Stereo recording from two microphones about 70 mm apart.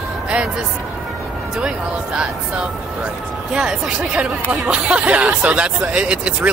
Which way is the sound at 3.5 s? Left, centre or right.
Centre.